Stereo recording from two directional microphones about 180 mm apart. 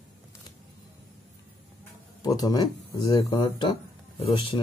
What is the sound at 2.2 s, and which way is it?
Speech, 20° left (ahead or behind).